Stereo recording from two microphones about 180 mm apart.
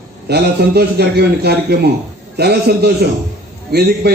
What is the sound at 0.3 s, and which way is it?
A man's voice, 65° right (ahead or behind).